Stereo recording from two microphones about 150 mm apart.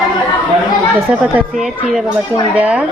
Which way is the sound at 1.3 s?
5° right (ahead or behind).